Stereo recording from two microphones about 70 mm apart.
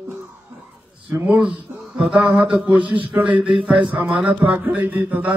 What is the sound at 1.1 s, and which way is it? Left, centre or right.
Speech, right.